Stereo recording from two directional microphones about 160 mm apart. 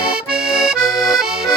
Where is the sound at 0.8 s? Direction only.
20° left (ahead or behind).